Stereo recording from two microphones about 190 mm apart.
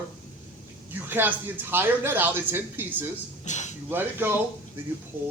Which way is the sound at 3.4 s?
40° left (ahead or behind).